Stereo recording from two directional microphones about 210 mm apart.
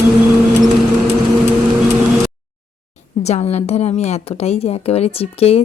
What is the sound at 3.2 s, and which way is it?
A woman's voice, 30° left (ahead or behind).